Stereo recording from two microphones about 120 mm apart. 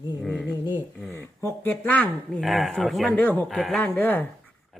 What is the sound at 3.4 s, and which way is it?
Speech, centre (ahead or behind).